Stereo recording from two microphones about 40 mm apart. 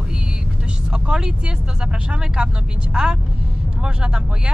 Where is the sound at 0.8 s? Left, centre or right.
Right.